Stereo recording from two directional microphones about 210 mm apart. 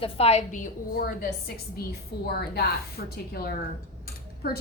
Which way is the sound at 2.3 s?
50° left (ahead or behind).